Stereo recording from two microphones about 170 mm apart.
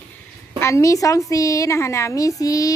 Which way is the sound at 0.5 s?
15° left (ahead or behind).